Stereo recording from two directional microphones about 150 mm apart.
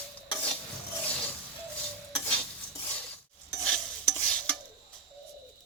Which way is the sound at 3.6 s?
5° left (ahead or behind).